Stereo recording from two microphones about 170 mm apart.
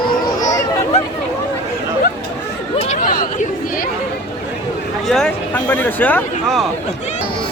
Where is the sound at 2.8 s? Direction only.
45° left (ahead or behind).